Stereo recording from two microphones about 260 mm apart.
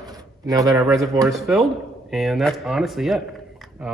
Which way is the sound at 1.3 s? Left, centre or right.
Centre.